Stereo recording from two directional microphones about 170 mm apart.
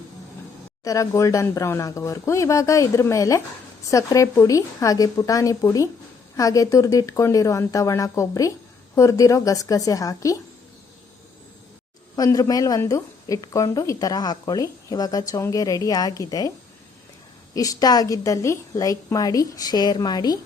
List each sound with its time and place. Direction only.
0.9 s a woman's voice: 20° left (ahead or behind)
12.1 s a woman's voice: 20° left (ahead or behind)
17.5 s a woman's voice: 20° left (ahead or behind)